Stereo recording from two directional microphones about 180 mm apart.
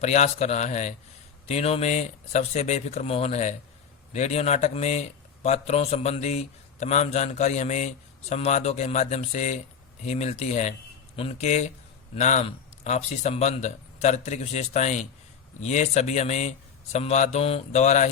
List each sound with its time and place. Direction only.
0.0 s speech: 40° left (ahead or behind)